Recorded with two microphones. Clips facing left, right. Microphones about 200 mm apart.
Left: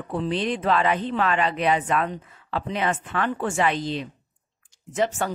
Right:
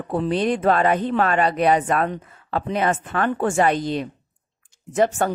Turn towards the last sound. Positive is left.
turn(degrees=-50)  # may be behind; listen again after turning